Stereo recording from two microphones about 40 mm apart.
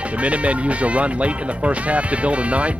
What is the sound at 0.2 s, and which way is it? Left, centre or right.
Speech, right.